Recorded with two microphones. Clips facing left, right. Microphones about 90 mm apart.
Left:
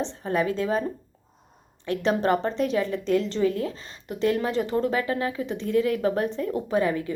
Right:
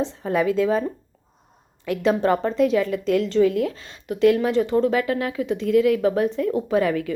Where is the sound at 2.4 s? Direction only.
30° left (ahead or behind).